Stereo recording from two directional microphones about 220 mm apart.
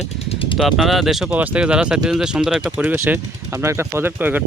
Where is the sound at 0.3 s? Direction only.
25° left (ahead or behind).